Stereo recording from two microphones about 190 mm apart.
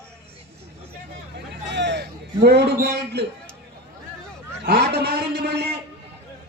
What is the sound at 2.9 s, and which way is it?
Speech, 60° right (ahead or behind).